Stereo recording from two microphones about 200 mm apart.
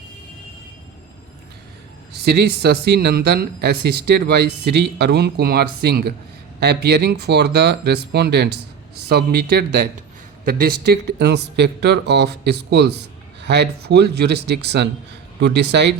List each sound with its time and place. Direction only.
2.1 s speech: 55° right (ahead or behind)